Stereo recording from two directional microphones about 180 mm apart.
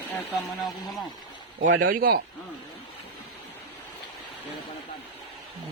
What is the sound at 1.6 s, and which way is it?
Speech, 50° right (ahead or behind).